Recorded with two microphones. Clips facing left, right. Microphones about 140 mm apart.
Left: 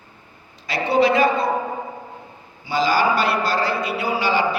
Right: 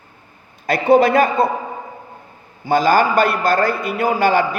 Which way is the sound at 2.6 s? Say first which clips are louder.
Right 5 dB; 50° right (ahead or behind).